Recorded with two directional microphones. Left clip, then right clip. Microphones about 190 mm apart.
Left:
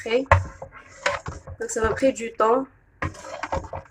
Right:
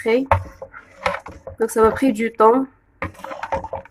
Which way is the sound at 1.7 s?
60° right (ahead or behind).